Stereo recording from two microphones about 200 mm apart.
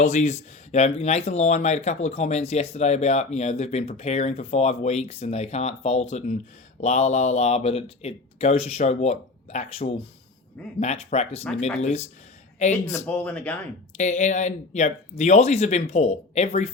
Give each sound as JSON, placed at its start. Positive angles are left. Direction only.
{"t": 0.0, "sound": "speech", "side_deg": 35}
{"t": 12.7, "sound": "speech", "side_deg": 15}
{"t": 13.9, "sound": "speech", "side_deg": 35}